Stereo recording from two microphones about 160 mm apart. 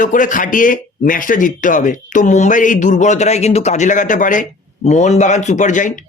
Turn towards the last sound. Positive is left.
turn(degrees=50)  # may be behind; listen again after turning